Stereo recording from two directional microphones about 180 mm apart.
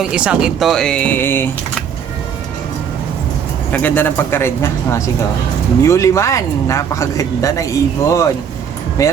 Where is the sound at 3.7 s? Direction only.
10° left (ahead or behind).